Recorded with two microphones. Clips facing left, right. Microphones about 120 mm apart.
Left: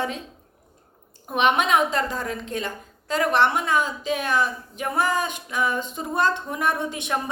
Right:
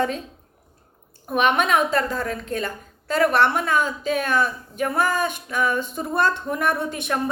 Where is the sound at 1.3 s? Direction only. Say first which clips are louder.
Right 1 dB; 20° left (ahead or behind).